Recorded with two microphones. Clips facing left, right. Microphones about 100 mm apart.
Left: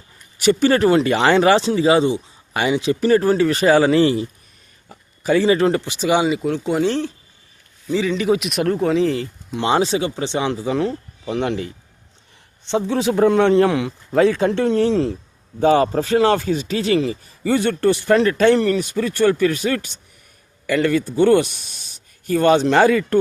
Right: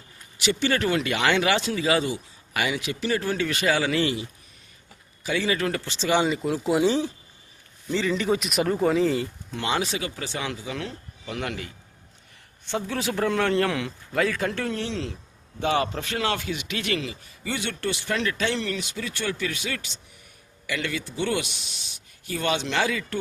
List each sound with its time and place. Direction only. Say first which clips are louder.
0.3 s speech: left 9 dB; 45° left (ahead or behind); by 5.9 s 25° left (ahead or behind)
5.9 s speech: left 5 dB; 15° left (ahead or behind); by 7.1 s 5° right (ahead or behind)
7.9 s speech: left 6 dB; 5° left (ahead or behind)
9.6 s a man's voice: left 9 dB; 30° left (ahead or behind)
14.8 s speech: left 13 dB; 40° left (ahead or behind)